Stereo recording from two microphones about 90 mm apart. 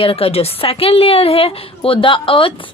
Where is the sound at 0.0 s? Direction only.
90° left; by 2.5 s 75° left (ahead or behind).